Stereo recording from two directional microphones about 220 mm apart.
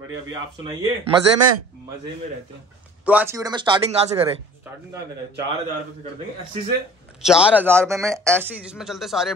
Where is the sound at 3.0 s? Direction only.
10° right (ahead or behind).